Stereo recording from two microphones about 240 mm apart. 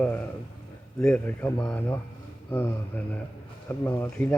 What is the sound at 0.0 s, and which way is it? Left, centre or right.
Speech, centre.